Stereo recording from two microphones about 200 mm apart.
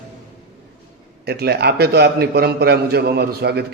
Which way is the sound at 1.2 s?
50° right (ahead or behind).